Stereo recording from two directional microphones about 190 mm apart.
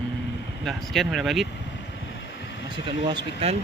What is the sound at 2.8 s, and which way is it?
Speech, 25° right (ahead or behind).